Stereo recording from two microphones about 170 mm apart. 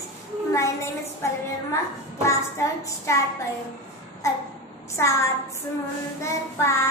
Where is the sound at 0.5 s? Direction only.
15° left (ahead or behind).